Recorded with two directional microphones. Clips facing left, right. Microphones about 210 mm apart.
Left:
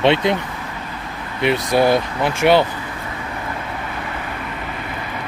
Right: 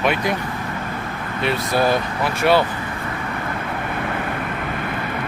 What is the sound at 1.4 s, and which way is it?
Speech, 20° left (ahead or behind).